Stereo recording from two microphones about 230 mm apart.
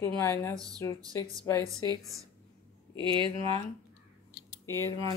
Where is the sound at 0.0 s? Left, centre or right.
Centre.